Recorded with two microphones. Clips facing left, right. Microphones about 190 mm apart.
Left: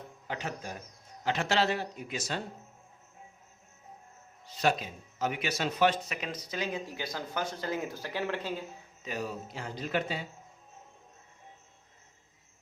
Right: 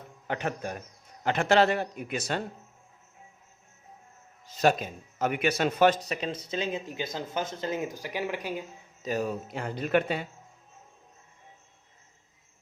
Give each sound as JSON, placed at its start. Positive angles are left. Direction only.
{"t": 0.3, "sound": "a man's voice", "side_deg": -60}
{"t": 4.4, "sound": "speech", "side_deg": -45}
{"t": 9.0, "sound": "a man's voice", "side_deg": -45}